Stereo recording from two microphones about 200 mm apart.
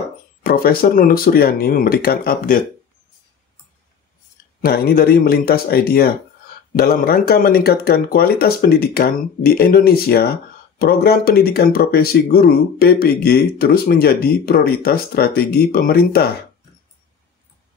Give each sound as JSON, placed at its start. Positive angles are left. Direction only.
{"t": 0.4, "sound": "speech", "side_deg": 50}
{"t": 4.6, "sound": "speech", "side_deg": 50}